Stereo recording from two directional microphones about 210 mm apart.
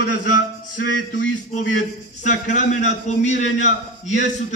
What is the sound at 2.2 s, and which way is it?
A man's voice, 35° left (ahead or behind).